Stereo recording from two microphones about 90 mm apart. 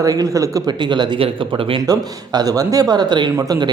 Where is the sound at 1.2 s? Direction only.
80° right.